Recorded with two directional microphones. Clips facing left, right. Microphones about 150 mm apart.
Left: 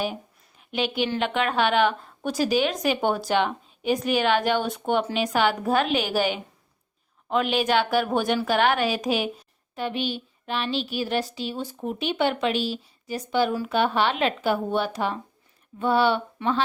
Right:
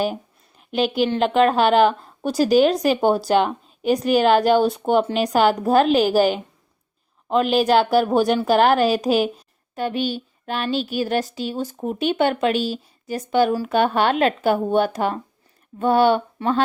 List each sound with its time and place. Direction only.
0.8 s a woman's voice: 40° right (ahead or behind)